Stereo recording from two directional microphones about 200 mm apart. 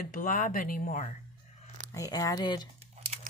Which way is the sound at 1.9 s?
15° left (ahead or behind).